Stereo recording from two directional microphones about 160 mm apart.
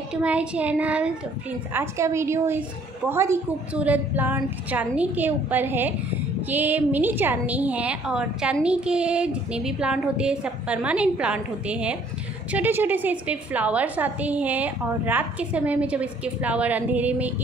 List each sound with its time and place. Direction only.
0.1 s a woman's voice: 5° right (ahead or behind)